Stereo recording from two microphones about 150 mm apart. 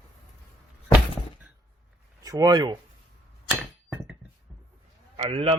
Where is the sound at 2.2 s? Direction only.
25° right (ahead or behind).